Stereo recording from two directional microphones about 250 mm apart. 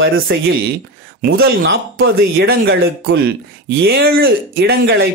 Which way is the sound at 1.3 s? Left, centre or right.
Right.